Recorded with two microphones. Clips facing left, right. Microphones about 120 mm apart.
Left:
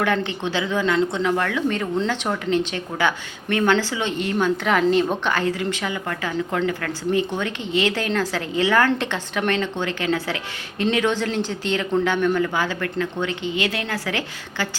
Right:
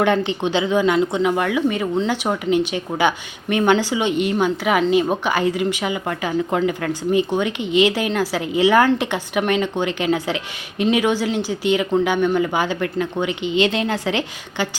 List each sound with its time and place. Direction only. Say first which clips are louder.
0.3 s a woman's voice: right 5 dB; 20° right (ahead or behind)